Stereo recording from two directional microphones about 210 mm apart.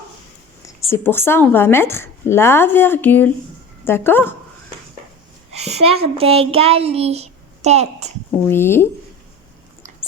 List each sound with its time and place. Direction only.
0.9 s a woman's voice: 10° left (ahead or behind)
5.5 s a child's voice: 30° right (ahead or behind)
8.4 s a woman's voice: 10° left (ahead or behind)